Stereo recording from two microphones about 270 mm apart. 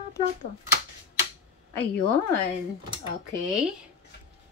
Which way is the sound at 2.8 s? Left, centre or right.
Centre.